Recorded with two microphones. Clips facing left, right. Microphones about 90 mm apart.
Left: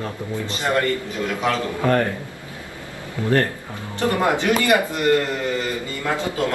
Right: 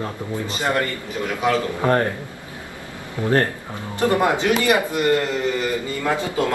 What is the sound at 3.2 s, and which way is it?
Speech, 20° right (ahead or behind).